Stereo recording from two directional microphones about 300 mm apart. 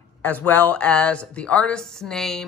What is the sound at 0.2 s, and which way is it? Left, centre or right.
Speech, centre.